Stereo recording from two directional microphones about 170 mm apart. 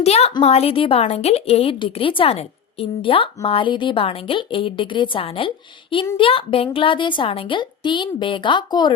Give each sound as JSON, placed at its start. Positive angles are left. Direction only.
{"t": 0.0, "sound": "a woman's voice", "side_deg": 35}